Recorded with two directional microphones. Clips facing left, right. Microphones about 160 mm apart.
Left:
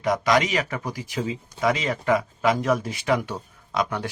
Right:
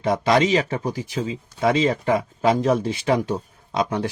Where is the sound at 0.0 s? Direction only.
30° right (ahead or behind).